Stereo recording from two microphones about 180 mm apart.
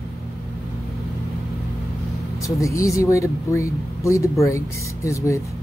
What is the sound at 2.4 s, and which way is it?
Speech, 15° left (ahead or behind).